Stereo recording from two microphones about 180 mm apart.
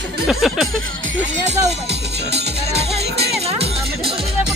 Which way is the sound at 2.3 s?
65° right (ahead or behind).